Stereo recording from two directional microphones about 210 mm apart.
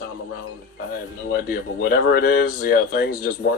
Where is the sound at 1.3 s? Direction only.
50° left (ahead or behind).